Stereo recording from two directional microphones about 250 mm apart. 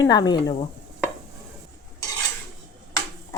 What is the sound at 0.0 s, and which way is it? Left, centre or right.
Speech, centre.